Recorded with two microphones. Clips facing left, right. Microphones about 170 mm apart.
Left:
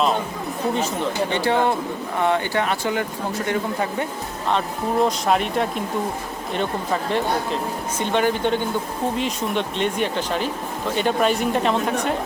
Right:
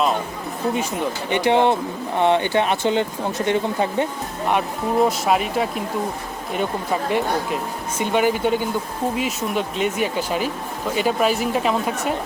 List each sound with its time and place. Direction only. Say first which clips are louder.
1.3 s speech: right 5 dB; 20° right (ahead or behind)
4.9 s speech: right 1 dB; 5° right (ahead or behind)
7.1 s speech: right 1 dB; 10° right (ahead or behind)